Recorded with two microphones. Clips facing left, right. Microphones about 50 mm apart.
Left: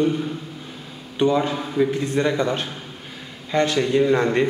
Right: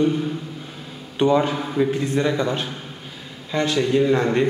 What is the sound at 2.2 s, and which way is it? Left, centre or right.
Speech, centre.